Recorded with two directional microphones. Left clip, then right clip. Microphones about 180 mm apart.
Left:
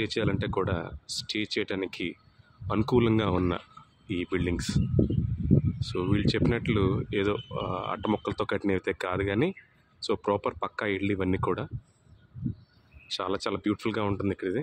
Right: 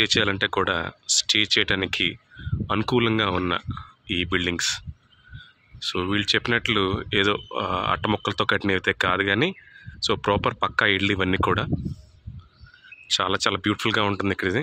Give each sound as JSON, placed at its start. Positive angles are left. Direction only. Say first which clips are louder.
{"t": 0.0, "sound": "speech", "louder": "right 9 dB", "side_deg": 0}
{"t": 13.1, "sound": "speech", "louder": "right 8 dB", "side_deg": 0}